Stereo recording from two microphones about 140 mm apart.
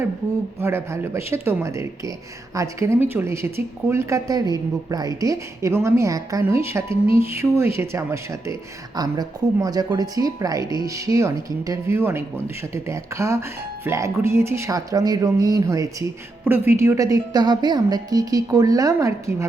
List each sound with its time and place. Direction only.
0.6 s speech: 20° right (ahead or behind)